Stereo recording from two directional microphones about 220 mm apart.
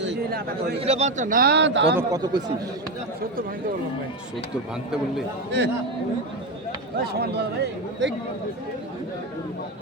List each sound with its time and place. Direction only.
0.0 s speech: 50° right (ahead or behind)
0.8 s a man's voice: 30° right (ahead or behind); by 2.0 s 55° right (ahead or behind)
2.0 s speech: 15° right (ahead or behind)
5.5 s speech: 50° right (ahead or behind)
7.1 s speech: 50° right (ahead or behind)